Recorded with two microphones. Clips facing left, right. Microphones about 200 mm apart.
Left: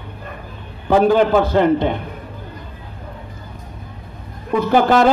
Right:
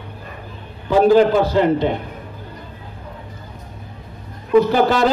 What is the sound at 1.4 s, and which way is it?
Speech, 55° left (ahead or behind).